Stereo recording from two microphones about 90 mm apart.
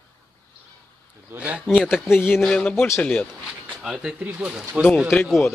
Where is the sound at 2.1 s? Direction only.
20° left (ahead or behind).